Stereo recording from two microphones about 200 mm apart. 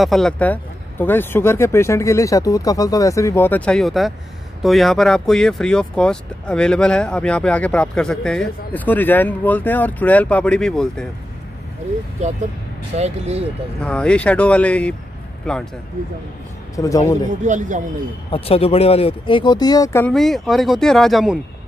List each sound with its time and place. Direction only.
0.0 s speech: centre (ahead or behind)
12.9 s speech: 35° right (ahead or behind)
13.7 s speech: 5° left (ahead or behind)
16.7 s speech: 15° left (ahead or behind)
17.5 s speech: 40° right (ahead or behind)
18.3 s speech: 30° left (ahead or behind)
20.1 s speech: centre (ahead or behind)